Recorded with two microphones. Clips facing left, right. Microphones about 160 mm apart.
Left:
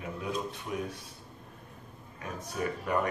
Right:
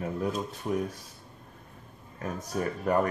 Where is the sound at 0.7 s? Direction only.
35° right (ahead or behind).